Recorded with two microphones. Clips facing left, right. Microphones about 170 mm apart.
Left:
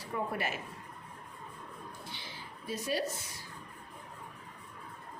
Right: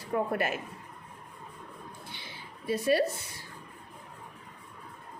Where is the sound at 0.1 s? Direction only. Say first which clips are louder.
Right 6 dB; 55° right (ahead or behind).